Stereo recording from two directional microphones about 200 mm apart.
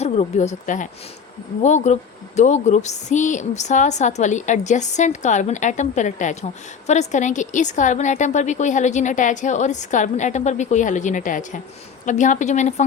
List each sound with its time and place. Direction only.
0.0 s a woman's voice: 35° left (ahead or behind)